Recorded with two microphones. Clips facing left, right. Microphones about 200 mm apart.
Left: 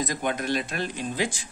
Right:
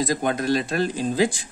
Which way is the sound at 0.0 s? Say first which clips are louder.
Right 5 dB; 35° right (ahead or behind).